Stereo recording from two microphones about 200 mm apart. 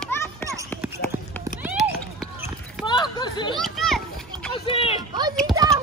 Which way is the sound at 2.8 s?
20° left (ahead or behind).